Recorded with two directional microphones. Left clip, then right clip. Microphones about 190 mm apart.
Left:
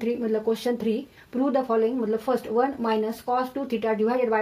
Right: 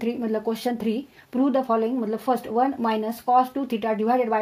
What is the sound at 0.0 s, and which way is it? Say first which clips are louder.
Speech: left 1 dB; 50° right (ahead or behind).